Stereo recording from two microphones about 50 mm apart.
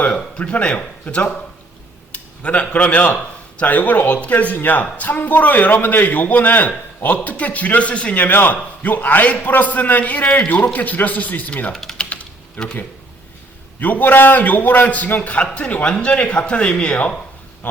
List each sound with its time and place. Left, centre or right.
0.0 s a man's voice: left
11.7 s speech: centre
13.7 s a man's voice: left